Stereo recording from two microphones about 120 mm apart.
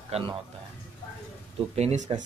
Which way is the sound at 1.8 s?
60° right (ahead or behind).